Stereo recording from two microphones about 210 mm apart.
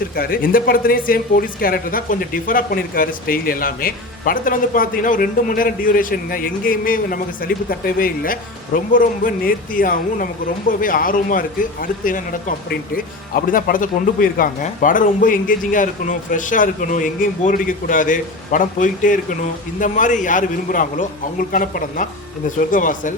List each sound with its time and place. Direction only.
0.2 s speech: 45° left (ahead or behind)